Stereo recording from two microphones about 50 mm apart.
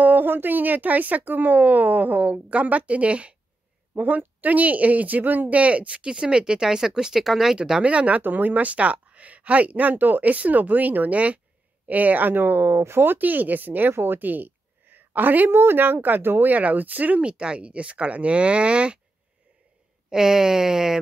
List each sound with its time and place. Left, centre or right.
0.0 s speech: right
3.9 s speech: right; by 7.8 s centre
7.8 s speech: right
8.2 s speech: right
13.9 s a sound: right
15.5 s speech: right
17.2 s speech: right
20.1 s speech: centre